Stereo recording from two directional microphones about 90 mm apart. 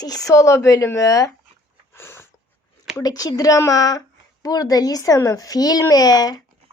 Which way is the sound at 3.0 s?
45° left (ahead or behind).